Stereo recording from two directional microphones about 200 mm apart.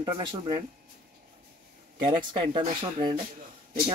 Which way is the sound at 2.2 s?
25° right (ahead or behind).